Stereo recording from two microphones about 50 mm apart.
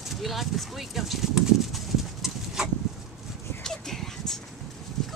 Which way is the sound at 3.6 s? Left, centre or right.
Centre.